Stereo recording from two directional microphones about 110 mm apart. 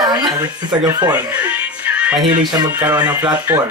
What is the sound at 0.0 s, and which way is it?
Speech, 35° right (ahead or behind).